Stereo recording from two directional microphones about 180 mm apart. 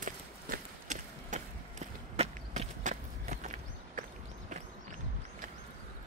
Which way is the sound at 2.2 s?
40° right (ahead or behind).